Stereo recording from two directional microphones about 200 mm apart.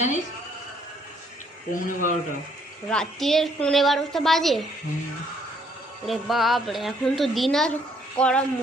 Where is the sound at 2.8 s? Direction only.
5° left (ahead or behind).